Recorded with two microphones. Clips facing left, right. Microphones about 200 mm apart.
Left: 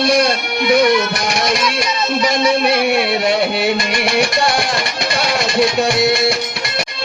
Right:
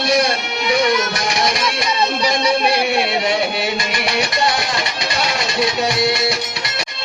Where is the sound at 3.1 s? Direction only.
55° left (ahead or behind).